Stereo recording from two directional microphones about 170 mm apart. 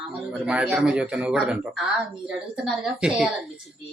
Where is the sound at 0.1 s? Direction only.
5° right (ahead or behind).